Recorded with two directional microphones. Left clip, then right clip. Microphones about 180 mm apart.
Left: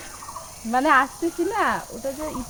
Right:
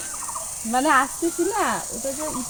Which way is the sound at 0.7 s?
10° left (ahead or behind).